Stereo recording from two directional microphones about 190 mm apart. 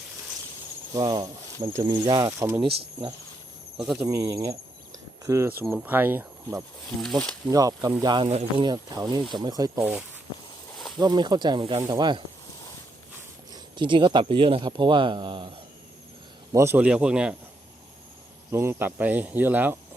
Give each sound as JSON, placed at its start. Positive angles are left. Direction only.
{"t": 0.9, "sound": "speech", "side_deg": -20}
{"t": 3.9, "sound": "speech", "side_deg": -15}
{"t": 7.0, "sound": "speech", "side_deg": 5}
{"t": 7.4, "sound": "speech", "side_deg": -20}
{"t": 10.8, "sound": "a sound", "side_deg": 0}
{"t": 11.0, "sound": "speech", "side_deg": -20}
{"t": 13.7, "sound": "speech", "side_deg": -25}
{"t": 18.5, "sound": "speech", "side_deg": -15}